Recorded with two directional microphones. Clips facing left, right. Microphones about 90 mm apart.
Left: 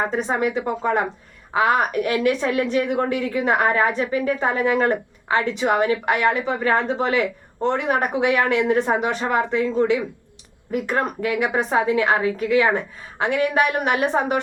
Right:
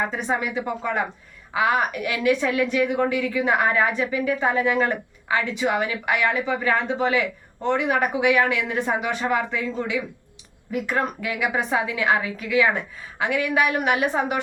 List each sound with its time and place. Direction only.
0.0 s a woman's voice: 40° left (ahead or behind)